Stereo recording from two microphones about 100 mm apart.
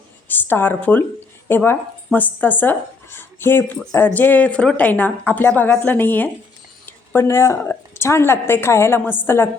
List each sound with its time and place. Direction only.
0.3 s a woman's voice: 20° left (ahead or behind)